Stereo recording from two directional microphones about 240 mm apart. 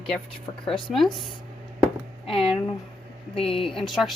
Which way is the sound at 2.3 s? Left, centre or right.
Left.